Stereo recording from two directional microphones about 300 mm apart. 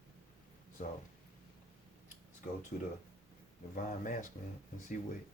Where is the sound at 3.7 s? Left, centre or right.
Left.